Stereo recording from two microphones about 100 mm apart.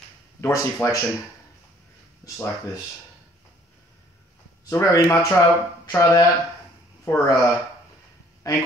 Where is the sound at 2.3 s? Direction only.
30° left (ahead or behind).